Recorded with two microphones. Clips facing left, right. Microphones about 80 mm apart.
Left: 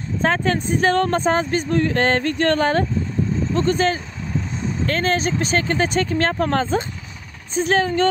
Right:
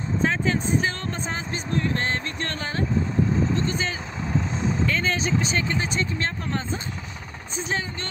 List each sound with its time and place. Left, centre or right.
0.2 s speech: left
3.5 s speech: left